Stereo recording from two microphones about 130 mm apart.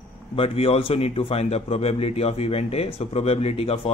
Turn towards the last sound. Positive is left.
turn(degrees=45)  # may be behind; listen again after turning